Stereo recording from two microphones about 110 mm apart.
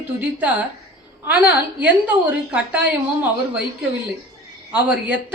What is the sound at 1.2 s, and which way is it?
A woman's voice, 15° right (ahead or behind).